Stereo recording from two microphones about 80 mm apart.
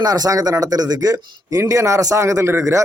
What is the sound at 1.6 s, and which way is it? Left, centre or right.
A man's voice, right.